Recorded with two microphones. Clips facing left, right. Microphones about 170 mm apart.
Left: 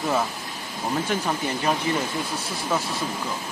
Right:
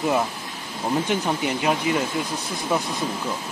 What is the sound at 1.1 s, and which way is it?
Speech, 15° right (ahead or behind).